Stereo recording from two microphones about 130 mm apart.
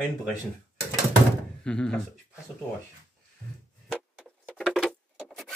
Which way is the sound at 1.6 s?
5° left (ahead or behind).